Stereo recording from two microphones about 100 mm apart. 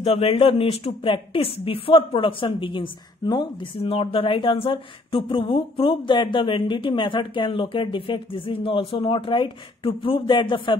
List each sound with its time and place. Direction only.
0.0 s a woman's voice: 80° left; by 10.8 s 55° left (ahead or behind)